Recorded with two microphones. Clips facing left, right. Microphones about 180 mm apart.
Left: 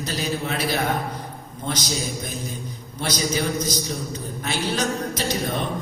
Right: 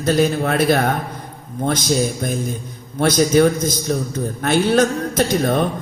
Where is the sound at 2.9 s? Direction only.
55° right (ahead or behind).